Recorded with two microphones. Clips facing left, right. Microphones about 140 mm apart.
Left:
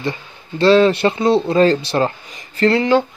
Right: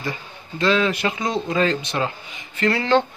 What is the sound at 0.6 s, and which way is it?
A man's voice, 35° left (ahead or behind).